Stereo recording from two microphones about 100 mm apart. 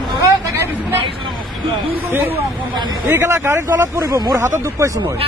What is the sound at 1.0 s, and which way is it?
Vehicle, 65° right (ahead or behind).